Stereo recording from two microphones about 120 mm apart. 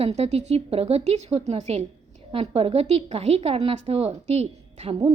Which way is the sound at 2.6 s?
55° right (ahead or behind).